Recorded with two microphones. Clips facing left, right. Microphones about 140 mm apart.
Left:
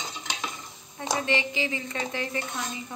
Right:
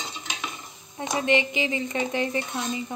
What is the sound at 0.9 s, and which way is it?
Speech, 20° right (ahead or behind).